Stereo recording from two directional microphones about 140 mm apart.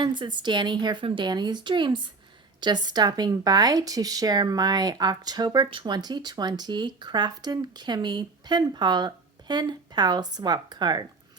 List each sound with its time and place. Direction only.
0.0 s speech: 35° right (ahead or behind)